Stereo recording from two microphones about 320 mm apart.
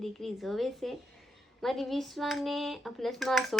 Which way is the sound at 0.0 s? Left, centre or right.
Centre.